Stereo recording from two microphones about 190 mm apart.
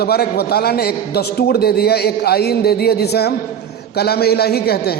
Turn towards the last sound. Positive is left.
turn(degrees=55)  # may be behind; listen again after turning